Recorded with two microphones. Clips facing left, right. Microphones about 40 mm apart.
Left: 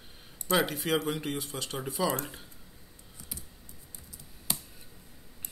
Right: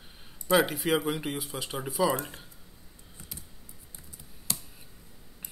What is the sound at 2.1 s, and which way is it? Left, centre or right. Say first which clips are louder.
Speech: right 2 dB; right.